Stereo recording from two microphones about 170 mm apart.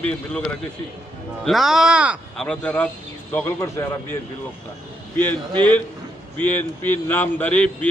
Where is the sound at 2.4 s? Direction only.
5° left (ahead or behind).